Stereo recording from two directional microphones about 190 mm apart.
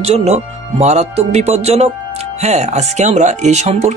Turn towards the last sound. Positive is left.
turn(degrees=-40)  # may be behind; listen again after turning